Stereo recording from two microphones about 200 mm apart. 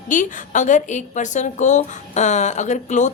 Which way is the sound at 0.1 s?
40° left (ahead or behind).